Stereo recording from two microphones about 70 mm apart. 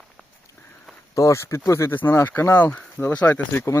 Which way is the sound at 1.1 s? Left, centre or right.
Left.